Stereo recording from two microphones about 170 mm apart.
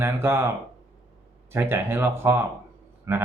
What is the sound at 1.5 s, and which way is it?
Speech, 15° right (ahead or behind).